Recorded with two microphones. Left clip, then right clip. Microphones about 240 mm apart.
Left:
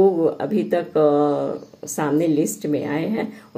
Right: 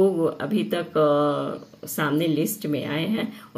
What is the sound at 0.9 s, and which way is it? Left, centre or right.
Speech, centre.